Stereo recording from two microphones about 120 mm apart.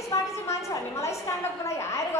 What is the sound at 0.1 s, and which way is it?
A woman's voice, 25° left (ahead or behind).